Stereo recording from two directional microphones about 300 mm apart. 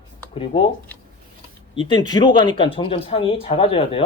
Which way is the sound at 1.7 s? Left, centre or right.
Centre.